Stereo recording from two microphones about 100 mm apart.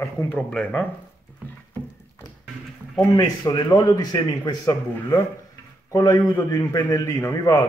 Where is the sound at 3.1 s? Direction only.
45° left (ahead or behind).